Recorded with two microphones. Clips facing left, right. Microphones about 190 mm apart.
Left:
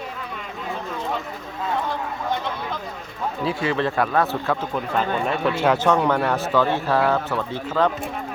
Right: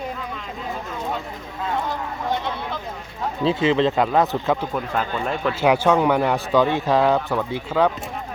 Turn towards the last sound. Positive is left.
turn(degrees=-10)  # may be behind; listen again after turning